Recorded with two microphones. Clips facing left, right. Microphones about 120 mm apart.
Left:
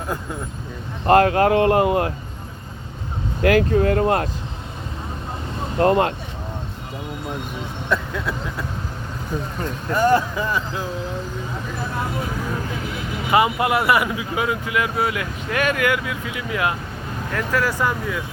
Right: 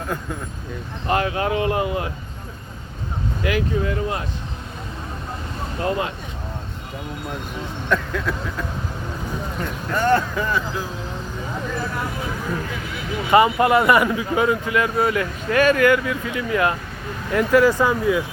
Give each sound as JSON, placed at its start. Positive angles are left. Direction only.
{"t": 1.0, "sound": "speech", "side_deg": 55}
{"t": 3.4, "sound": "speech", "side_deg": 55}
{"t": 5.8, "sound": "speech", "side_deg": 55}
{"t": 7.9, "sound": "speech", "side_deg": 10}
{"t": 9.9, "sound": "speech", "side_deg": 10}
{"t": 13.3, "sound": "speech", "side_deg": 10}
{"t": 17.3, "sound": "speech", "side_deg": -10}